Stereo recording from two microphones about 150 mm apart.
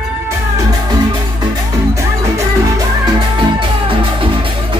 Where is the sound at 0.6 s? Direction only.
25° right (ahead or behind).